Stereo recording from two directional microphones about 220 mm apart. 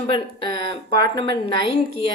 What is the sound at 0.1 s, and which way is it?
Speech, 25° left (ahead or behind).